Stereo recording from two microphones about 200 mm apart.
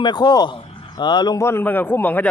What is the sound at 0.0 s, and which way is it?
A man's voice, 20° left (ahead or behind).